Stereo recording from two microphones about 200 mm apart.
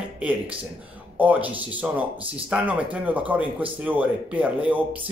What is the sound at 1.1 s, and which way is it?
Speech, 10° right (ahead or behind).